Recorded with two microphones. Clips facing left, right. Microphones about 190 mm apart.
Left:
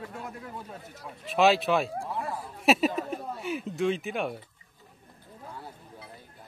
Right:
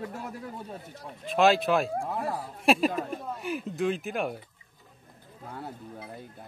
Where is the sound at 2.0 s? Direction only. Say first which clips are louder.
Right 2 dB; 40° right (ahead or behind).